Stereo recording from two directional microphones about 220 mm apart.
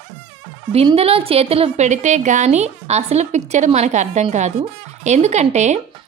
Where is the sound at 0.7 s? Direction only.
25° right (ahead or behind).